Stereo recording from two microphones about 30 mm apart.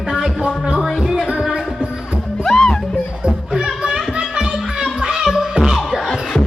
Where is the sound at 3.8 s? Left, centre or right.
Right.